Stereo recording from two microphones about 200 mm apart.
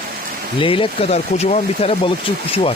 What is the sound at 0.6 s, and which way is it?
Speech, 25° left (ahead or behind).